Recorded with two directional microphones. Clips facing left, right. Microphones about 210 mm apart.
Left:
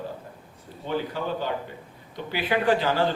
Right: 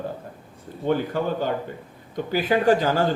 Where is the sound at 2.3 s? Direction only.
45° right (ahead or behind).